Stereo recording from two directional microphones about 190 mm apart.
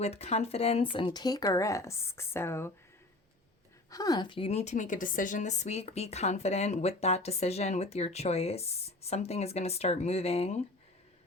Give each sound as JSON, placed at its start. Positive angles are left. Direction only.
{"t": 0.0, "sound": "a woman's voice", "side_deg": 35}
{"t": 3.8, "sound": "a woman's voice", "side_deg": 20}